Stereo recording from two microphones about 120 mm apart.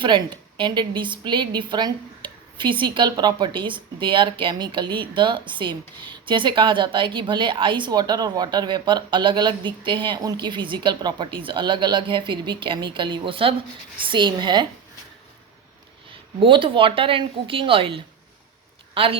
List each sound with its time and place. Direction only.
0.0 s a woman's voice: 40° right (ahead or behind)
16.4 s a woman's voice: 45° right (ahead or behind)